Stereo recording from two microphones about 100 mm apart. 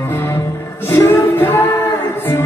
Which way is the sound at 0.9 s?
25° left (ahead or behind).